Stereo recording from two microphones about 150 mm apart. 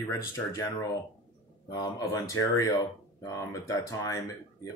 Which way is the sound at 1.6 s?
25° left (ahead or behind).